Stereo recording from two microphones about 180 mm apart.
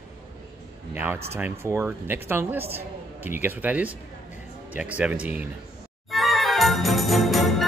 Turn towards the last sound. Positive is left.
turn(degrees=0)  # may be behind; listen again after turning